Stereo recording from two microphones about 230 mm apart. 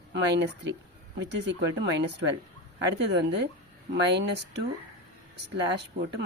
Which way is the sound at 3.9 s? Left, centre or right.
Right.